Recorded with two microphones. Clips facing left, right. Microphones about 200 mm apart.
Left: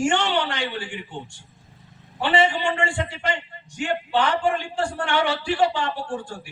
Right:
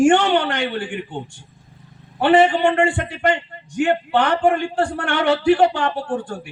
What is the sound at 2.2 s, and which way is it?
A man's voice, 55° right (ahead or behind).